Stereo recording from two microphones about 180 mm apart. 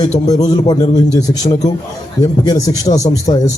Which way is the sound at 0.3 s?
20° left (ahead or behind).